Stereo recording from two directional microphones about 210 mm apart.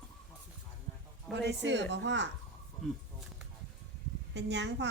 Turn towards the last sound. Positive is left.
turn(degrees=-55)  # may be behind; listen again after turning